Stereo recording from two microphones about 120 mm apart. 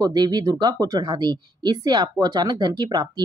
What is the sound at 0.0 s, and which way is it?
Speech, 35° right (ahead or behind).